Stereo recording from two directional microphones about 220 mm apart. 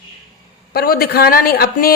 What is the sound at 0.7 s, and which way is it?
A man's voice, 45° left (ahead or behind).